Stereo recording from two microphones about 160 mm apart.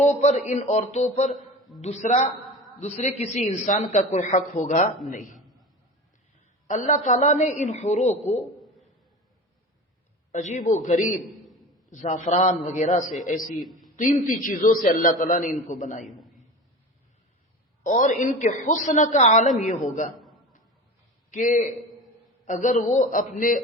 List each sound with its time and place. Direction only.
0.0 s a man's voice: 45° left (ahead or behind)
6.7 s a man's voice: 50° left (ahead or behind)
10.3 s a man's voice: 50° left (ahead or behind)
11.2 s a sound: centre (ahead or behind)
11.9 s a man's voice: 50° left (ahead or behind)
17.8 s a man's voice: 50° left (ahead or behind)
21.2 s a man's voice: 50° left (ahead or behind)